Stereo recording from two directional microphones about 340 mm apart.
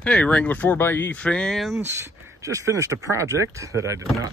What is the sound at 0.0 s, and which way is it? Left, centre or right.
Speech, centre.